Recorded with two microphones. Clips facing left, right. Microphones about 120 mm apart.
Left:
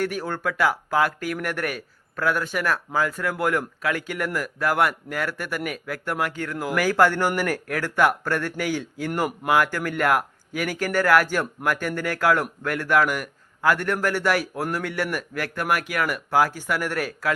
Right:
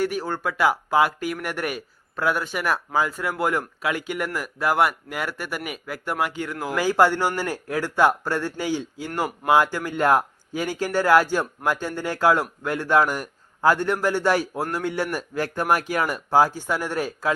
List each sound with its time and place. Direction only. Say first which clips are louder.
0.0 s speech: right 1 dB; 10° right (ahead or behind)